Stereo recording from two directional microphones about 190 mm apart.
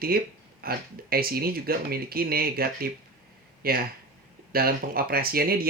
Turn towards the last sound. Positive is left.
turn(degrees=-50)  # may be behind; listen again after turning